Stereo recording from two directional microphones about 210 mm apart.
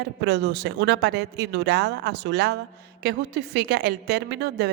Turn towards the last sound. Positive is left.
turn(degrees=-50)  # may be behind; listen again after turning